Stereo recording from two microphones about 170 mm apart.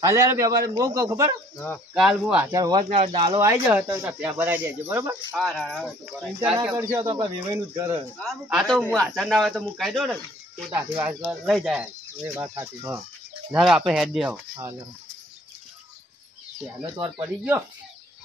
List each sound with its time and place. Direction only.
0.0 s a man's voice: 15° right (ahead or behind)
2.0 s speech: centre (ahead or behind)
2.5 s a man's voice: 25° right (ahead or behind)
5.3 s speech: centre (ahead or behind)
6.7 s speech: 20° right (ahead or behind)
8.2 s speech: centre (ahead or behind)
10.7 s speech: 10° right (ahead or behind)
11.2 s speech: centre (ahead or behind)
12.4 s speech: 15° right (ahead or behind)
13.5 s speech: 5° right (ahead or behind)
14.5 s a man's voice: 20° right (ahead or behind)
17.0 s speech: 15° right (ahead or behind)